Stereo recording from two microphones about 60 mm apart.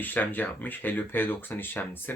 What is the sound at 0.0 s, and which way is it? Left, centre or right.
Speech, left.